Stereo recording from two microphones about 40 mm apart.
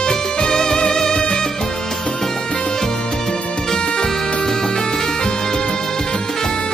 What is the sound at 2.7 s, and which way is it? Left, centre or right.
Music, centre.